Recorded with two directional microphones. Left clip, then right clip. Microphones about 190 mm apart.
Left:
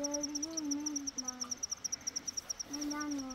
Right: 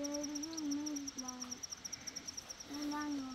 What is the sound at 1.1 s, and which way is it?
Bird, 30° left (ahead or behind).